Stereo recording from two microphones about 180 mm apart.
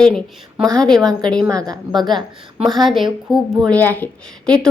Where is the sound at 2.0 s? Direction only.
25° right (ahead or behind).